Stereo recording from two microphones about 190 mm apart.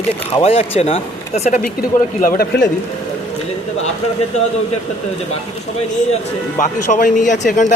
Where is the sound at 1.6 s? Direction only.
50° left (ahead or behind).